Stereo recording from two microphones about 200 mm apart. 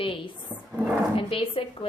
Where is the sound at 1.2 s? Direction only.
25° left (ahead or behind).